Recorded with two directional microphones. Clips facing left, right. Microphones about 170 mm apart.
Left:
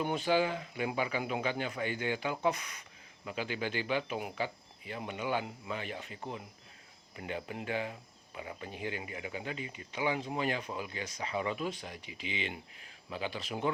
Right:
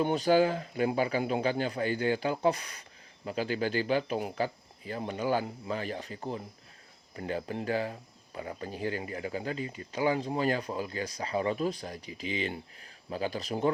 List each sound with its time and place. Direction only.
0.0 s speech: 35° right (ahead or behind)